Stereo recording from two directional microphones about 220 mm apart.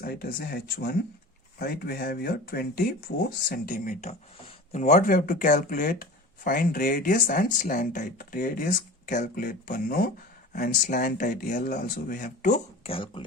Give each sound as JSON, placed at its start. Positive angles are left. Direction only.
{"t": 0.0, "sound": "speech", "side_deg": 45}